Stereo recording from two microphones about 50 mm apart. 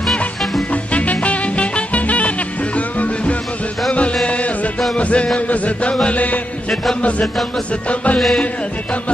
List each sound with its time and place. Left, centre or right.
0.9 s music: left
3.9 s music: left